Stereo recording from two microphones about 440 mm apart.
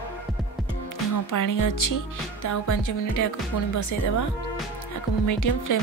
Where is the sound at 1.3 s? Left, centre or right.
Left.